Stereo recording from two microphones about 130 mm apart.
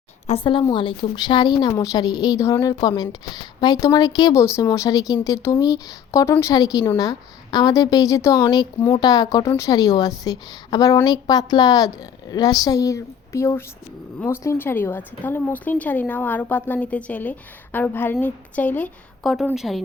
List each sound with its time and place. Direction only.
0.3 s a woman's voice: 65° left (ahead or behind)
0.7 s a woman's voice: 40° left (ahead or behind); by 18.9 s 10° left (ahead or behind)
19.2 s a woman's voice: centre (ahead or behind)